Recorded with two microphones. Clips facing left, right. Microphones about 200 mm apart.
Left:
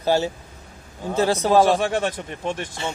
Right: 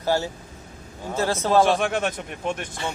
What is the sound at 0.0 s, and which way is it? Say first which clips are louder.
Speech: left 3 dB; 20° left (ahead or behind).